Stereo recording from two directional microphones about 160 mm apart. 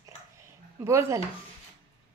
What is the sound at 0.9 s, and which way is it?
Speech, 15° right (ahead or behind).